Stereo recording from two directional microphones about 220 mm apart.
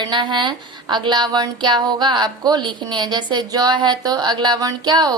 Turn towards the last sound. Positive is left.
turn(degrees=-20)  # may be behind; listen again after turning